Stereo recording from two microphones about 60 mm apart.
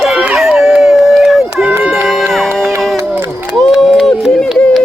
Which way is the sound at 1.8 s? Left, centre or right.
Right.